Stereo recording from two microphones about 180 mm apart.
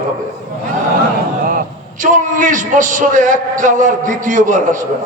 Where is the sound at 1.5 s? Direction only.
50° right (ahead or behind).